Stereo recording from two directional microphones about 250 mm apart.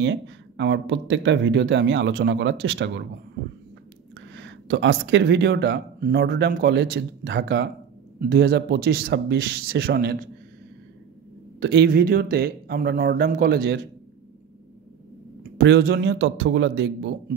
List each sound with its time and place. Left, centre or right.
0.0 s speech: right
4.3 s speech: right
11.6 s speech: right
15.5 s speech: right